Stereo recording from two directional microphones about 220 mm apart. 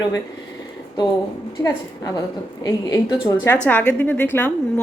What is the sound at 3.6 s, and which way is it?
A woman's voice, 10° left (ahead or behind).